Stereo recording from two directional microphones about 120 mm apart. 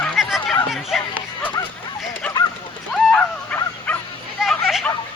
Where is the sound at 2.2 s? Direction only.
10° left (ahead or behind).